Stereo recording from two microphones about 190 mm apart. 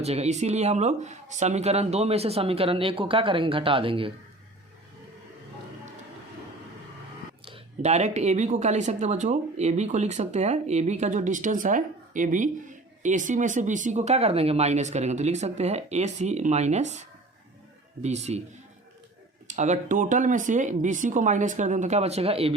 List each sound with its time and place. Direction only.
0.0 s speech: 35° right (ahead or behind)
7.4 s speech: 30° right (ahead or behind)
18.0 s speech: 35° right (ahead or behind)
19.5 s speech: 40° right (ahead or behind)